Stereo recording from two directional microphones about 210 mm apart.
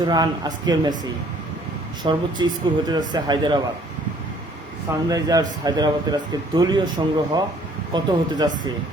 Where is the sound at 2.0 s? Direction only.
20° right (ahead or behind).